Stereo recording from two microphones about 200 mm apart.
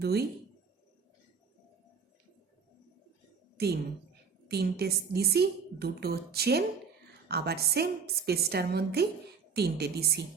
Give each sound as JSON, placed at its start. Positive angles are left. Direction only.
{"t": 0.0, "sound": "a woman's voice", "side_deg": -50}
{"t": 4.4, "sound": "a woman's voice", "side_deg": -55}